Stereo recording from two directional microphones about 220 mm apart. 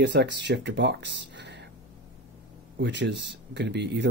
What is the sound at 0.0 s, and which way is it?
Speech, 50° right (ahead or behind).